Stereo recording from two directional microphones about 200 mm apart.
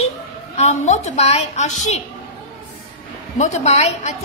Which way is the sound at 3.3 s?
35° left (ahead or behind).